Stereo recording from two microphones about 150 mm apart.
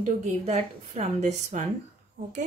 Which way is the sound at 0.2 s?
50° right (ahead or behind).